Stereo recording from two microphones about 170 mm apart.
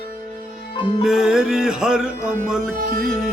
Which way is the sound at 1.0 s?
5° right (ahead or behind).